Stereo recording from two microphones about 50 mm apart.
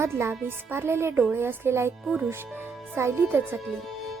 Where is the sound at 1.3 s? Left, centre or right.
Right.